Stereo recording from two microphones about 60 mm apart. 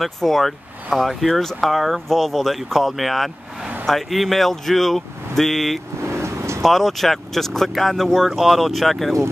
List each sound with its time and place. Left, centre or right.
0.0 s speech: centre
6.0 s vehicle: right
6.6 s speech: centre